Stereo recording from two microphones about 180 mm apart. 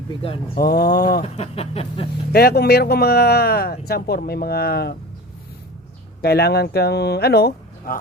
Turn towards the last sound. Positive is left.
turn(degrees=60)  # may be behind; listen again after turning